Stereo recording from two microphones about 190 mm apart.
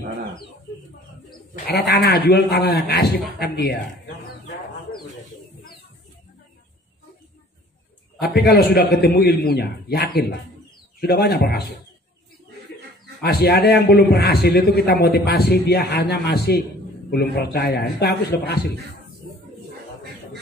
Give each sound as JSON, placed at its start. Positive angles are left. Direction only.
{"t": 1.5, "sound": "a man's voice", "side_deg": 55}
{"t": 8.2, "sound": "a man's voice", "side_deg": 55}
{"t": 13.2, "sound": "a man's voice", "side_deg": 55}